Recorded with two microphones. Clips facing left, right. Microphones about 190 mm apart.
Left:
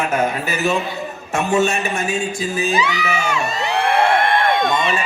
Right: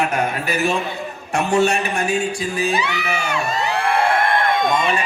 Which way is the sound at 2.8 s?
60° right (ahead or behind).